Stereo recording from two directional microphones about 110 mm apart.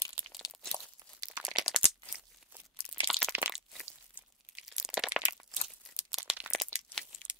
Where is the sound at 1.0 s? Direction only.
35° right (ahead or behind).